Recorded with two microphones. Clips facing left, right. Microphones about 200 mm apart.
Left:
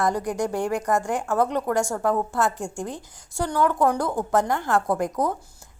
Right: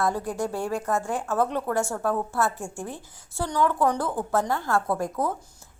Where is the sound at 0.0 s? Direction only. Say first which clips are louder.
Left 2 dB; 15° left (ahead or behind).